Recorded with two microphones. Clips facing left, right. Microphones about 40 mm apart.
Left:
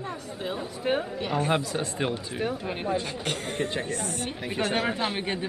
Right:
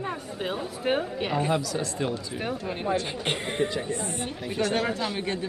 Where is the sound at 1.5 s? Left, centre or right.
Left.